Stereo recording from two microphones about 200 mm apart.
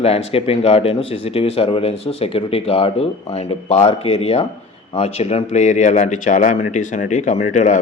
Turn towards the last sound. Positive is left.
turn(degrees=40)  # may be behind; listen again after turning